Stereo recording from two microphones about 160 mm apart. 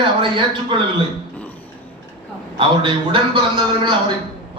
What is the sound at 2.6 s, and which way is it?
A man's voice, 30° right (ahead or behind).